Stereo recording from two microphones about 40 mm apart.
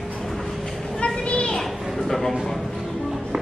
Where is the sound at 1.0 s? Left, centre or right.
Left.